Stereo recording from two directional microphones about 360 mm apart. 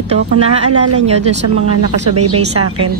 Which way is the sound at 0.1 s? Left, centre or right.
Centre.